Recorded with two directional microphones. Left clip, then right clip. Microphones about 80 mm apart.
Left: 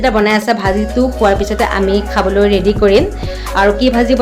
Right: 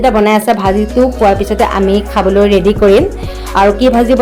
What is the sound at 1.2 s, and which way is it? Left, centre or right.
Speech, right.